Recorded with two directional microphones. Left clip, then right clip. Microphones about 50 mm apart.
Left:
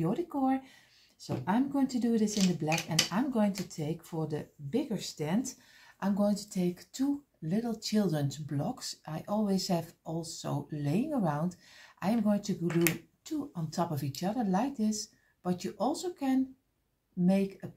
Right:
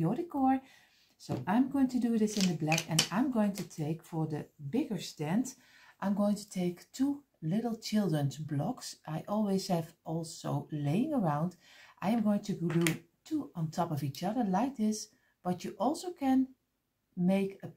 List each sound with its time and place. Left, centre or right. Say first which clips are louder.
0.0 s speech: even; right
1.2 s speech: even; right
2.6 s speech: even; right
5.9 s speech: left 2 dB; right
12.6 s speech: left 2 dB; left
13.7 s speech: left 1 dB; right